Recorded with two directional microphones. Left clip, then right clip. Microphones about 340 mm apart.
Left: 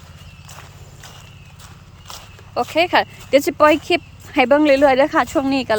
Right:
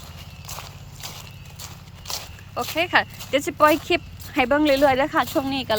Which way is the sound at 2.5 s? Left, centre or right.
Centre.